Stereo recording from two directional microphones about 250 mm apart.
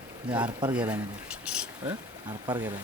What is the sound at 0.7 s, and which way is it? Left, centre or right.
Speech, centre.